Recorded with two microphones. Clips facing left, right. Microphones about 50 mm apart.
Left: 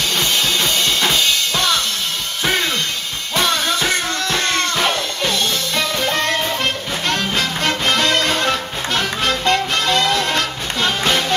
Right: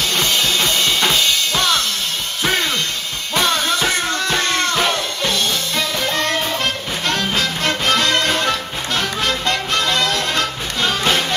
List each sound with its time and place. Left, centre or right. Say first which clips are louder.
0.2 s drum kit: right 1 dB; centre
3.3 s music: even; centre
5.8 s music: left 2 dB; centre
11.1 s music: even; centre